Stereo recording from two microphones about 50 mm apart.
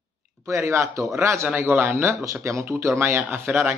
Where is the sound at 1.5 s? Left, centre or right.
Right.